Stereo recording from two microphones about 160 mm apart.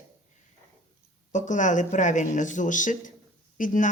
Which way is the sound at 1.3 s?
50° left (ahead or behind).